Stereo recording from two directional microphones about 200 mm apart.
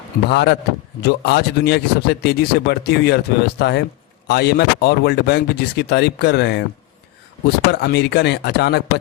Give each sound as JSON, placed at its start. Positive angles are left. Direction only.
{"t": 0.3, "sound": "speech", "side_deg": 60}
{"t": 7.7, "sound": "speech", "side_deg": 60}